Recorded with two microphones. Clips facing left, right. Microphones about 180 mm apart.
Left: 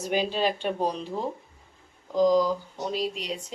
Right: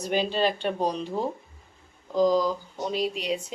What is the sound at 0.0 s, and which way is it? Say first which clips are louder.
Speech: right 1 dB; 5° left (ahead or behind).